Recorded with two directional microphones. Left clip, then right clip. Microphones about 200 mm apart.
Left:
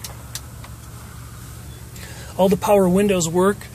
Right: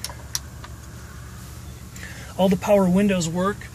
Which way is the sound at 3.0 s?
30° left (ahead or behind).